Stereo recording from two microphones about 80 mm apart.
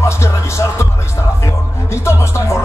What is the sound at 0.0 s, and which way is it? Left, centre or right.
Music, left.